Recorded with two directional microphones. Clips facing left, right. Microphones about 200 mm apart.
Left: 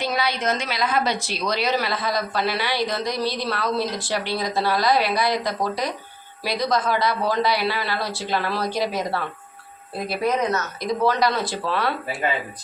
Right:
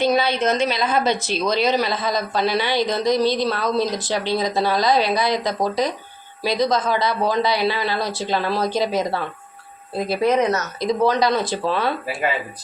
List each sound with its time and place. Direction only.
0.0 s speech: 25° right (ahead or behind)
10.1 s speech: 25° right (ahead or behind)